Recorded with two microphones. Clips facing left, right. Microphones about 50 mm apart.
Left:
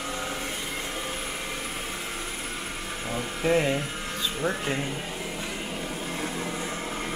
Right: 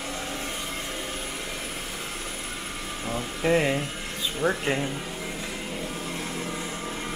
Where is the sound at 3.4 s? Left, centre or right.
Centre.